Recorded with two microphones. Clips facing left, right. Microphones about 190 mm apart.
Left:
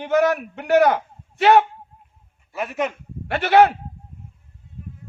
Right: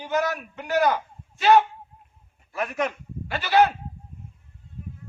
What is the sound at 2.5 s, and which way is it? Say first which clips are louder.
Speech: left 2 dB; 5° left (ahead or behind).